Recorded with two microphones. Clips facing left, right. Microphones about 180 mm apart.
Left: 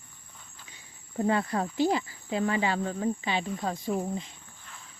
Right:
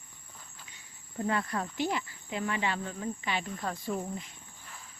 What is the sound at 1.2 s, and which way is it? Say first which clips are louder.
Speech: left 5 dB; 25° left (ahead or behind).